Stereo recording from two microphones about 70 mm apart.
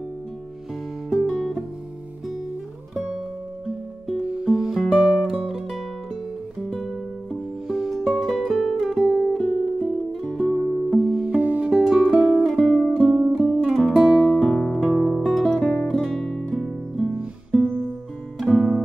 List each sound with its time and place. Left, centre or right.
1.2 s music: centre
4.2 s music: centre
7.6 s music: centre
9.4 s music: centre
10.9 s music: centre
11.2 s music: right
11.7 s music: centre
13.0 s music: centre
13.7 s music: centre
15.9 s guitar: centre
16.5 s music: centre
17.2 s music: centre
18.4 s music: centre